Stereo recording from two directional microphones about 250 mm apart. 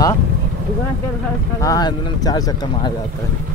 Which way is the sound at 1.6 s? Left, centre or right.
Centre.